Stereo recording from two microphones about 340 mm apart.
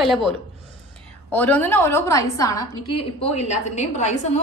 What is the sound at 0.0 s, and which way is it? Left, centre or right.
Speech, centre.